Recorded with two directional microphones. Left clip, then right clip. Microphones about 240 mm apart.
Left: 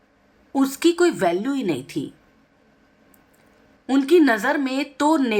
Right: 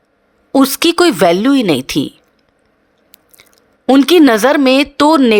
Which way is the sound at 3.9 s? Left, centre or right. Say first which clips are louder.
Right 9 dB; right.